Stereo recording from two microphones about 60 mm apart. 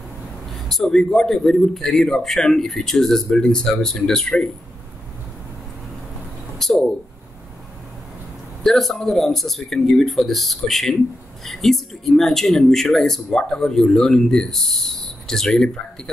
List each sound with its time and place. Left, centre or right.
0.5 s speech: centre
6.6 s a sound: centre
8.6 s speech: centre